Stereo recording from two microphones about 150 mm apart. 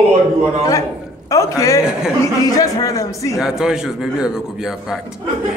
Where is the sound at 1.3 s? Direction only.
20° left (ahead or behind).